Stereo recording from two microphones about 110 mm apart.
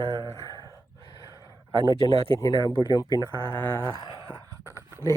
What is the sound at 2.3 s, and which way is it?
Speech, 35° left (ahead or behind).